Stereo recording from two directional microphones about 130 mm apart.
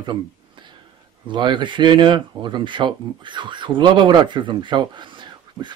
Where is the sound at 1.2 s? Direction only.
40° right (ahead or behind).